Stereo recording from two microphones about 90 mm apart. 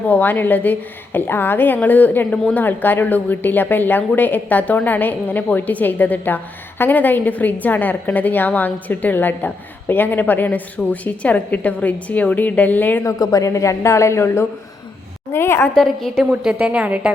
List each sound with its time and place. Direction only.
0.1 s a woman's voice: 20° left (ahead or behind)
13.1 s a woman's voice: 40° left (ahead or behind)
15.7 s a woman's voice: centre (ahead or behind)
16.3 s a woman's voice: 10° right (ahead or behind)